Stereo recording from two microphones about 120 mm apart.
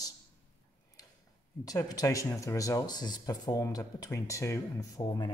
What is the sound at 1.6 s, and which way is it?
Speech, 30° left (ahead or behind).